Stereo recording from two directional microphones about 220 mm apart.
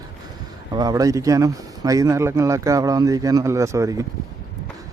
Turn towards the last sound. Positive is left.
turn(degrees=-15)  # may be behind; listen again after turning